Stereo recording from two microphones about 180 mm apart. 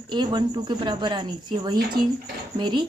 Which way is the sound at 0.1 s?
25° right (ahead or behind).